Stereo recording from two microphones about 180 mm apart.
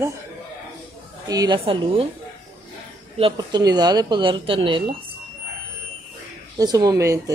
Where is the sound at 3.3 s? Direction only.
20° right (ahead or behind).